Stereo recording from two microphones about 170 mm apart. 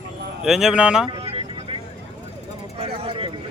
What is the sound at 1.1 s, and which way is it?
Vehicle, 35° right (ahead or behind).